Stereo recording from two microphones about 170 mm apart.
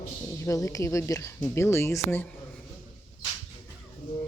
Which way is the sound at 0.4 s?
20° left (ahead or behind).